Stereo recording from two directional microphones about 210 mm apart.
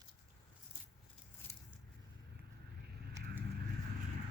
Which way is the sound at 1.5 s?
10° left (ahead or behind).